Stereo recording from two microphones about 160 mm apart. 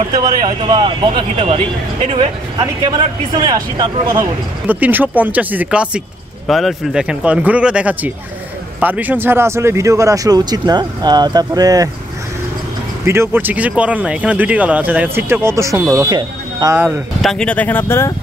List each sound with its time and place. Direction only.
0.2 s speech: 25° right (ahead or behind)
2.6 s speech: 25° right (ahead or behind)
4.6 s speech: 10° right (ahead or behind)
13.0 s speech: 15° right (ahead or behind)
16.7 s speech: 15° right (ahead or behind)
17.2 s speech: 5° left (ahead or behind)